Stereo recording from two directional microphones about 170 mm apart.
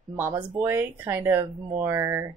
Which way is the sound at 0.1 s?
15° right (ahead or behind).